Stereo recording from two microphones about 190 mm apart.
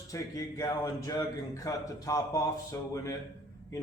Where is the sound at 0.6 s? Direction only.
20° left (ahead or behind).